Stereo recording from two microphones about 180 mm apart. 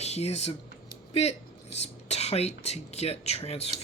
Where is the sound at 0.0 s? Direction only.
35° left (ahead or behind).